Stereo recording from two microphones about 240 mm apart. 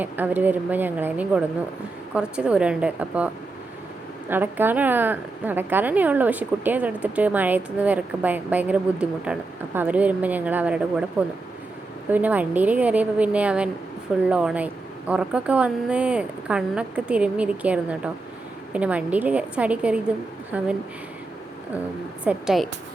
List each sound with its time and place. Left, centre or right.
0.0 s a woman's voice: centre
4.3 s a woman's voice: centre
12.1 s a woman's voice: centre
22.2 s a woman's voice: centre